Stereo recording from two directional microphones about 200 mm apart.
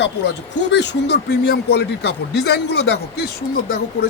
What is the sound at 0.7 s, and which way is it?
Speech, 60° left (ahead or behind).